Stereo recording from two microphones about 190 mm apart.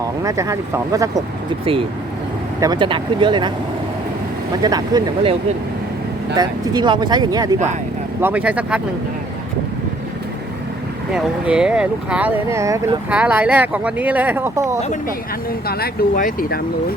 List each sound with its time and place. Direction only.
0.2 s speech: 15° right (ahead or behind)
2.6 s speech: 25° right (ahead or behind)
4.6 s speech: 20° right (ahead or behind)
6.3 s speech: 20° right (ahead or behind)
8.2 s speech: 10° right (ahead or behind)
11.1 s speech: 5° right (ahead or behind)
15.4 s speech: 55° left (ahead or behind)